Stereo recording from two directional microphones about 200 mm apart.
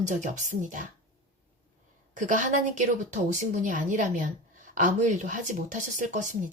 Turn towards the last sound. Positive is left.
turn(degrees=-40)  # may be behind; listen again after turning